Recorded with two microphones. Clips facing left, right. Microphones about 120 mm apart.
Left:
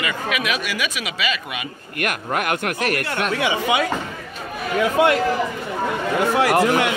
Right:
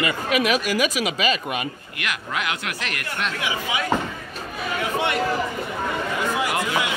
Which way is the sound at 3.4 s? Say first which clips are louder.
Left 9 dB; 85° left.